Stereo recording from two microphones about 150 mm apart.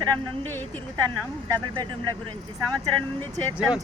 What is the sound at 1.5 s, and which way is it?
Speech, 30° right (ahead or behind).